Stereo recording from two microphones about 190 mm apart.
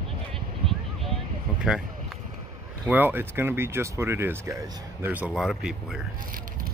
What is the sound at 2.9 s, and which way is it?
Speech, 10° right (ahead or behind).